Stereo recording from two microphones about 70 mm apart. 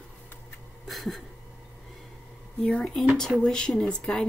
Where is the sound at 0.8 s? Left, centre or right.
Centre.